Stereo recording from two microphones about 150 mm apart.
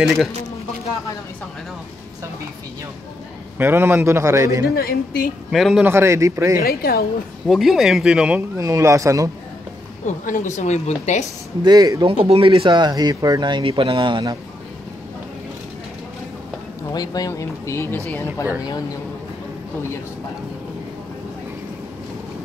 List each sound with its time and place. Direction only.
3.5 s a man's voice: 15° right (ahead or behind)
4.7 s a woman's voice: 85° left
5.5 s speech: centre (ahead or behind)
5.9 s a man's voice: 15° right (ahead or behind)
6.6 s a woman's voice: 90° left
7.4 s speech: centre (ahead or behind)
8.5 s a man's voice: 20° right (ahead or behind)
10.0 s a woman's voice: 55° left (ahead or behind)
11.6 s a man's voice: 25° right (ahead or behind)
12.1 s speech: 40° right (ahead or behind)
16.9 s speech: 25° left (ahead or behind)